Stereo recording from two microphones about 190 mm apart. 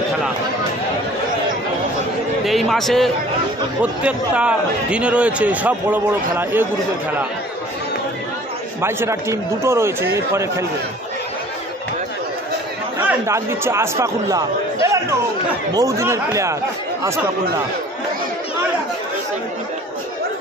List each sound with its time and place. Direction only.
2.4 s a man's voice: centre (ahead or behind)
8.8 s a man's voice: 15° right (ahead or behind)
13.3 s a man's voice: 15° right (ahead or behind)